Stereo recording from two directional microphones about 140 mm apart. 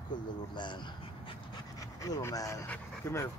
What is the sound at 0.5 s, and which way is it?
Speech, 35° left (ahead or behind).